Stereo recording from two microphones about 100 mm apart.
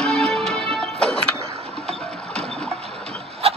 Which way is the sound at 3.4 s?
75° right (ahead or behind).